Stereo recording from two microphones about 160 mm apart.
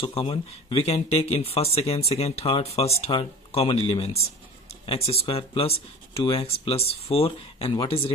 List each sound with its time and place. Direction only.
0.0 s speech: 35° left (ahead or behind)